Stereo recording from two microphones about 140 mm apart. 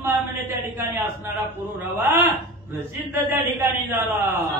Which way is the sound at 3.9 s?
15° right (ahead or behind).